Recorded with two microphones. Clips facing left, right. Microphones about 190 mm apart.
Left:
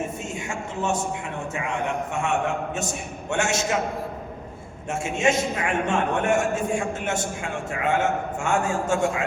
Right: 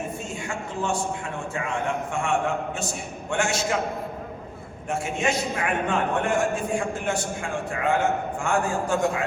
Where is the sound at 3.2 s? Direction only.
25° left (ahead or behind).